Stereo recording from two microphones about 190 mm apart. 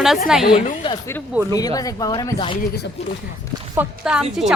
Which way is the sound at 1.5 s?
20° left (ahead or behind).